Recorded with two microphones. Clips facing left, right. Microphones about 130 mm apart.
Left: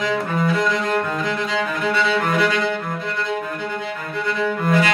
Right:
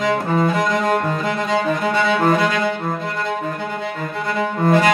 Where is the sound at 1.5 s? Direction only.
45° right (ahead or behind).